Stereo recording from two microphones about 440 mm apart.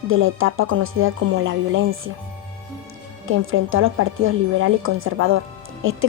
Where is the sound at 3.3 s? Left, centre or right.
Right.